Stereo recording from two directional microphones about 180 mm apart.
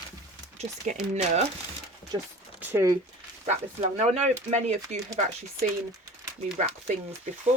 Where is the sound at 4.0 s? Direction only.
40° right (ahead or behind).